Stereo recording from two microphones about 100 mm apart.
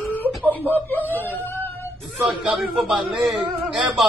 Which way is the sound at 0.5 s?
20° left (ahead or behind).